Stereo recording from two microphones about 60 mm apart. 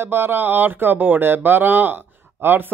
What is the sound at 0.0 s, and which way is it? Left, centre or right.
Speech, right.